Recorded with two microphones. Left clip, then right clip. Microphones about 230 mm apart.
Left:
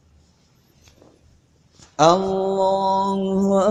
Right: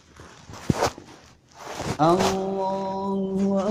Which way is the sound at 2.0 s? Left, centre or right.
Left.